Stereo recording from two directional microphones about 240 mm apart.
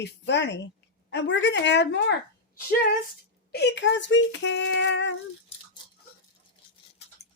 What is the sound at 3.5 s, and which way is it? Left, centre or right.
Speech, left.